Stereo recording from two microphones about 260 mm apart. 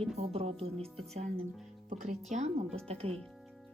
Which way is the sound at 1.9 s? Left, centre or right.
Right.